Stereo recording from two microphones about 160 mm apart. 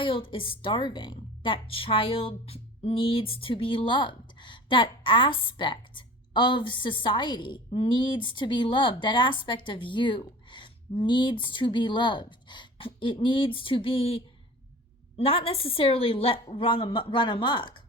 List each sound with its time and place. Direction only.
0.0 s a woman's voice: 35° left (ahead or behind)